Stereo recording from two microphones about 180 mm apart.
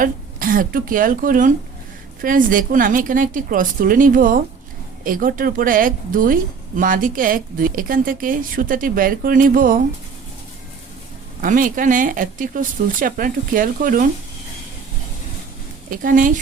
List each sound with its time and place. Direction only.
0.0 s speech: 50° right (ahead or behind)
11.3 s speech: 50° right (ahead or behind)
15.9 s speech: 50° right (ahead or behind)